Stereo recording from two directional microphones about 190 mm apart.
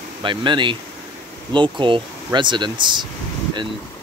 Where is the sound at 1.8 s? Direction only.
25° right (ahead or behind).